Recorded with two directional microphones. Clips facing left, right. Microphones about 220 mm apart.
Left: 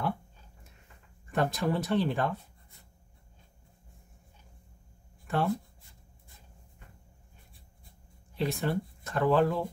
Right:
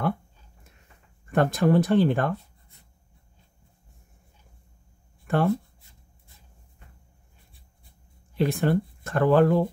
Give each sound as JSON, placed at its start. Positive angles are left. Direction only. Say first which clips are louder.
{"t": 1.3, "sound": "speech", "louder": "right 8 dB", "side_deg": -55}
{"t": 5.2, "sound": "a sound", "louder": "right 6 dB", "side_deg": -55}
{"t": 8.4, "sound": "speech", "louder": "right 7 dB", "side_deg": -55}